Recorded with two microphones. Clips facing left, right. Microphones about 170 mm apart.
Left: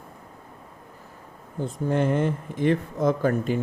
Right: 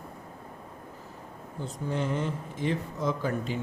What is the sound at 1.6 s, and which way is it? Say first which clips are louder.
Speech: left 7 dB; 55° left (ahead or behind).